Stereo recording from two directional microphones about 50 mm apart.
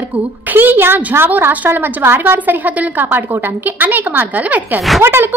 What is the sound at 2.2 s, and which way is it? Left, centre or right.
Speech, right.